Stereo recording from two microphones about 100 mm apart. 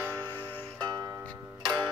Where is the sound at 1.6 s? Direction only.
45° right (ahead or behind).